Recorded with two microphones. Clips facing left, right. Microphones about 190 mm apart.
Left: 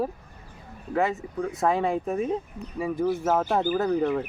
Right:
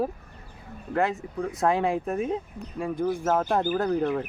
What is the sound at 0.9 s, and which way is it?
Speech, centre (ahead or behind).